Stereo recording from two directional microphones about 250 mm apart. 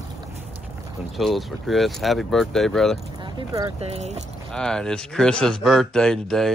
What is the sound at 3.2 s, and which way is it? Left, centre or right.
Speech, centre.